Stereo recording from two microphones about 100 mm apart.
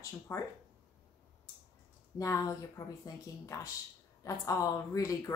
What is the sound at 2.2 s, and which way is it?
A woman's voice, 30° left (ahead or behind).